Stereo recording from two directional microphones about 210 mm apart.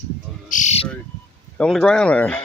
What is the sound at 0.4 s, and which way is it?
Bird, 35° left (ahead or behind).